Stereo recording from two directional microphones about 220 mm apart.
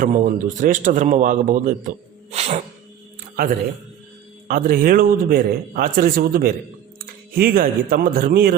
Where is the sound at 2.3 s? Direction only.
30° right (ahead or behind).